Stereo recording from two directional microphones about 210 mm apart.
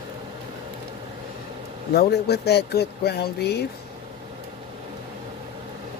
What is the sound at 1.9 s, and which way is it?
Speech, 50° left (ahead or behind).